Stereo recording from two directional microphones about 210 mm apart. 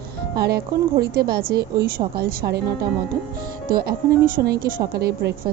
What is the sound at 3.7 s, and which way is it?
Speech, 45° right (ahead or behind).